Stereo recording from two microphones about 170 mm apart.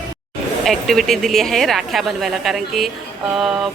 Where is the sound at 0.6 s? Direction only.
Centre (ahead or behind).